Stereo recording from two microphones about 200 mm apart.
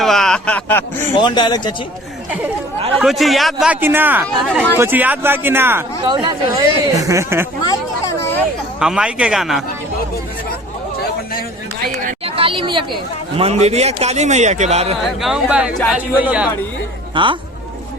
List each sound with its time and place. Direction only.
0.0 s a sound: centre (ahead or behind)
1.2 s speech: 20° left (ahead or behind)
2.9 s a man's voice: centre (ahead or behind)
4.4 s speech: 5° left (ahead or behind)
4.8 s speech: 10° right (ahead or behind)
7.6 s a sound: 20° left (ahead or behind)
8.8 s a man's voice: 5° right (ahead or behind)
12.2 s a sound: 25° right (ahead or behind)
13.3 s a man's voice: 30° right (ahead or behind)
15.2 s a man's voice: 5° right (ahead or behind)
17.2 s speech: 25° right (ahead or behind)